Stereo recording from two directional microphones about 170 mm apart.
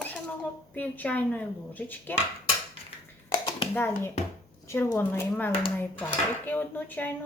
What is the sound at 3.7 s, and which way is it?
A woman's voice, 15° left (ahead or behind).